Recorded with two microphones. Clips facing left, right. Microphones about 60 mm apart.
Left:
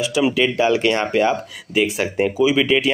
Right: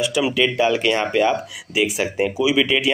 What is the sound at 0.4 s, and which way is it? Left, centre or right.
Speech, centre.